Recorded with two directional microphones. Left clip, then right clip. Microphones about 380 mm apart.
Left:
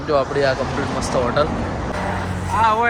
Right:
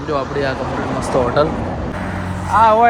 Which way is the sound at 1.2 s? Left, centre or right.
Centre.